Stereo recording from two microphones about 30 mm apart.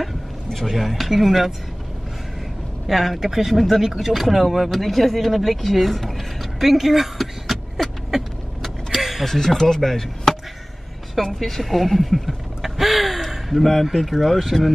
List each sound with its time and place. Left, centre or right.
0.0 s a sound: centre
0.7 s speech: centre
2.9 s speech: centre
8.6 s vehicle: centre
9.2 s speech: centre
11.3 s a sound: centre
13.9 s speech: centre